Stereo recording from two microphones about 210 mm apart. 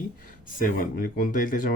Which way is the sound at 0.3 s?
40° left (ahead or behind).